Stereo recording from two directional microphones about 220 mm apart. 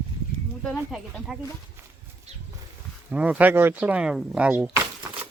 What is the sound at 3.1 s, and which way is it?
Speech, 5° right (ahead or behind).